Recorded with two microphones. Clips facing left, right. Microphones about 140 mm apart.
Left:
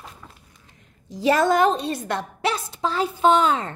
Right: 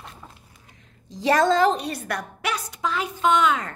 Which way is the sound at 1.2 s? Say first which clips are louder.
Left 1 dB; 20° left (ahead or behind).